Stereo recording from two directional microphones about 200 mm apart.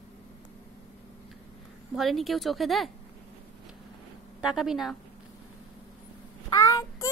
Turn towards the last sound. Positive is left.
turn(degrees=20)  # may be behind; listen again after turning